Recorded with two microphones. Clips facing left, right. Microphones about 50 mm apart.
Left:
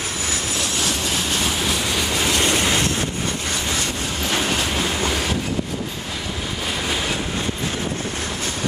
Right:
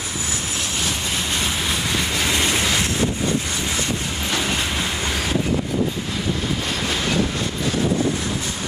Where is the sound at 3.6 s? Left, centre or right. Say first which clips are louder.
Even; centre.